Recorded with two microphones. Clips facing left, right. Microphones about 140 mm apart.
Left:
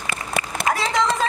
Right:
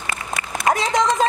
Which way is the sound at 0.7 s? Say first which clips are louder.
Right 2 dB; 20° right (ahead or behind).